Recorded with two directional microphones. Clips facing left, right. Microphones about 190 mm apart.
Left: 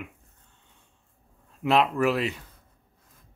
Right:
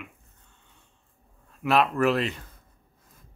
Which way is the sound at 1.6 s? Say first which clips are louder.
Even; 20° left (ahead or behind).